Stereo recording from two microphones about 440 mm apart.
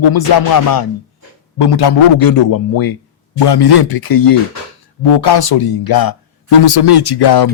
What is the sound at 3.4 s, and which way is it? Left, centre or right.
Speech, left.